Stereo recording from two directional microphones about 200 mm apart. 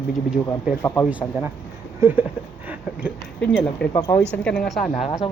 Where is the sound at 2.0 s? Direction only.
10° right (ahead or behind).